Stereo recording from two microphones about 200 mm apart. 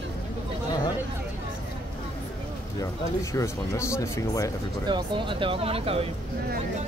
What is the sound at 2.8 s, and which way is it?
Speech, 15° left (ahead or behind).